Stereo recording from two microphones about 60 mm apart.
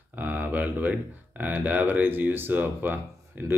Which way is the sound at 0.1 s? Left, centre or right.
Right.